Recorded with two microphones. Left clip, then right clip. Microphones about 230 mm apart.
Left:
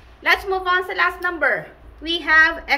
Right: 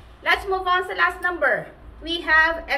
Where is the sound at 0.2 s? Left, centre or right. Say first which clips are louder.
Left 2 dB; left.